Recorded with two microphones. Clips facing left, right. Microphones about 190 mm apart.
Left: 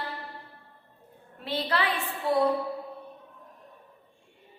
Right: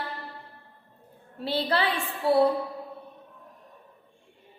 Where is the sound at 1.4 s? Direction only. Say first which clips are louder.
Right 3 dB; 30° right (ahead or behind).